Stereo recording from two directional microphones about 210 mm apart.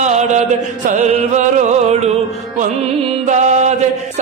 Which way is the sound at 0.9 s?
35° right (ahead or behind).